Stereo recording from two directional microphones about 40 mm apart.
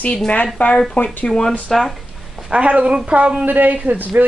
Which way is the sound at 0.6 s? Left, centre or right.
Left.